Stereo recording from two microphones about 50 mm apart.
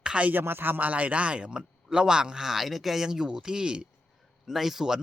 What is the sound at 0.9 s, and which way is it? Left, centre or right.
Speech, right.